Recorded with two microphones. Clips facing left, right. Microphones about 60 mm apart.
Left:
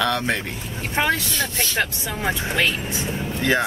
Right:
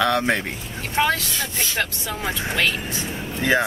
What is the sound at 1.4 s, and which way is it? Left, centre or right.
Speech, centre.